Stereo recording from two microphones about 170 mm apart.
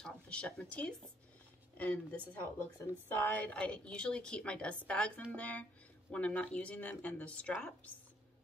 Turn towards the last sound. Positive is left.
turn(degrees=5)  # may be behind; listen again after turning